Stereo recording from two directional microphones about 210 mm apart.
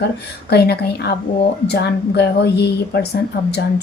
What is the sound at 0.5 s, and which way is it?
A woman's voice, 50° left (ahead or behind).